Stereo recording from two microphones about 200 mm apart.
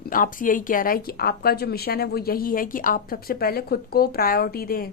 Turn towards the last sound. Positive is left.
turn(degrees=45)  # may be behind; listen again after turning